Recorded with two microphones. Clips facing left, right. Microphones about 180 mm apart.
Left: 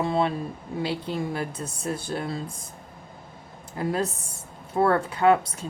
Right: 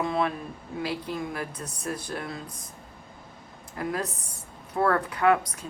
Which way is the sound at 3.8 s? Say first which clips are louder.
Left 4 dB; 25° left (ahead or behind).